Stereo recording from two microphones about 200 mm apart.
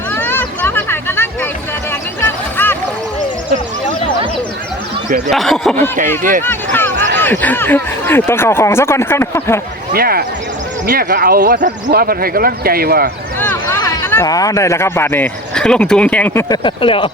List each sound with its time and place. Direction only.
0.1 s hubbub: 10° left (ahead or behind)
1.9 s a sound: 10° left (ahead or behind)
5.3 s speech: centre (ahead or behind)
6.4 s a sound: 10° left (ahead or behind)
7.2 s speech: 10° left (ahead or behind)
9.9 s speech: 50° right (ahead or behind)
13.4 s speech: 10° left (ahead or behind)